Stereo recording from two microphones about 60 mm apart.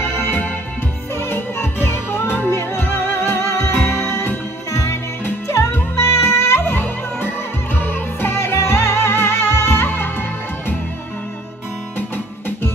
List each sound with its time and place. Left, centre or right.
0.0 s music: left